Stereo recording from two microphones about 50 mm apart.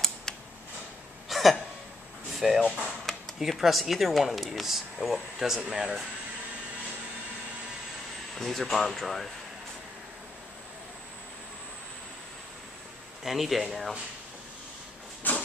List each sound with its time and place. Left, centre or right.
1.3 s hiccup: centre
2.3 s speech: centre
8.4 s speech: centre
13.2 s speech: centre
15.2 s a sound: left